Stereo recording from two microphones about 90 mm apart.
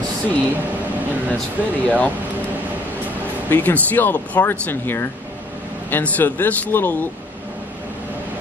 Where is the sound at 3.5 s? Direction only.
20° left (ahead or behind).